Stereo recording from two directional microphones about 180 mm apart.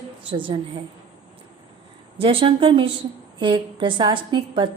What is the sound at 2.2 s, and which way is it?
A woman's voice, 30° right (ahead or behind).